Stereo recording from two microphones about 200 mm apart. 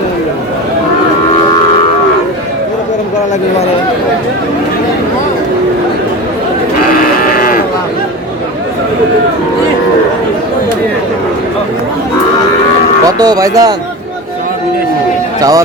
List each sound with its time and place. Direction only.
7.3 s sheep: 45° left (ahead or behind)
13.1 s speech: 20° right (ahead or behind)
15.4 s a man's voice: 15° right (ahead or behind)